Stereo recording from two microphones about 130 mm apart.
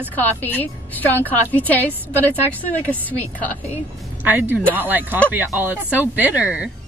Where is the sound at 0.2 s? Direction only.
15° left (ahead or behind).